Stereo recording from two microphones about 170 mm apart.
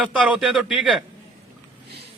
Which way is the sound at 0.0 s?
5° right (ahead or behind).